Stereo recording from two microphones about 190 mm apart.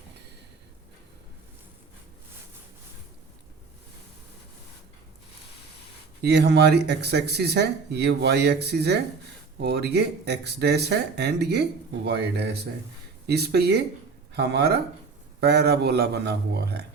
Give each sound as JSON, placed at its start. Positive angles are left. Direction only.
{"t": 6.2, "sound": "speech", "side_deg": -60}